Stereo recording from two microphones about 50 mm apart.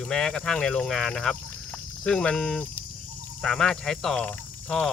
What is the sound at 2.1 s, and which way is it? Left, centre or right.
Speech, left.